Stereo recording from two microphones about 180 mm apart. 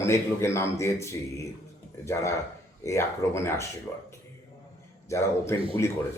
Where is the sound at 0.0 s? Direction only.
15° left (ahead or behind).